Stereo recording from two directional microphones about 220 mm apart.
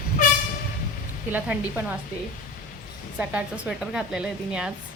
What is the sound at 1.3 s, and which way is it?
Speech, 10° right (ahead or behind).